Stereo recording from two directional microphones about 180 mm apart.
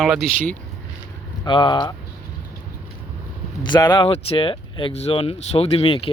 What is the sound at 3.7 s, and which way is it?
Speech, 25° left (ahead or behind).